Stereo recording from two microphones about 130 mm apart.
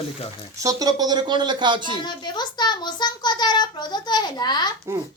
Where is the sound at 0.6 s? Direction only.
25° right (ahead or behind).